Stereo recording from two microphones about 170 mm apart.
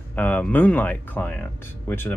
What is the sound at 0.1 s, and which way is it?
Speech, 10° left (ahead or behind).